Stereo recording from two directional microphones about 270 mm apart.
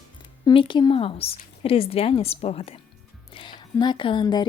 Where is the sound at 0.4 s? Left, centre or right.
Centre.